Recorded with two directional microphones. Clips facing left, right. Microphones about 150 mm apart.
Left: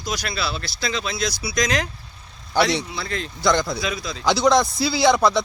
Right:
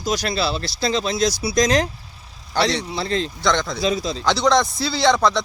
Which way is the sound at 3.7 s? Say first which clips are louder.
Right 6 dB; 35° right (ahead or behind).